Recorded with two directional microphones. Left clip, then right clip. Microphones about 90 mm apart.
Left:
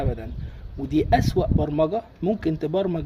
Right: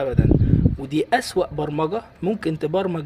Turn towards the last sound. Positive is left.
turn(degrees=25)  # may be behind; listen again after turning